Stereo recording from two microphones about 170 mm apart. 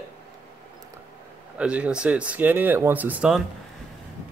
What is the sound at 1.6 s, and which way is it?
Speech, 5° right (ahead or behind).